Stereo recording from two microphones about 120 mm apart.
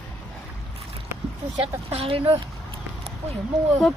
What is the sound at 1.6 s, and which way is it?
Speech, 55° right (ahead or behind).